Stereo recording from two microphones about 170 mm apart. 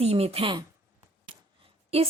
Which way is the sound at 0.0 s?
40° right (ahead or behind).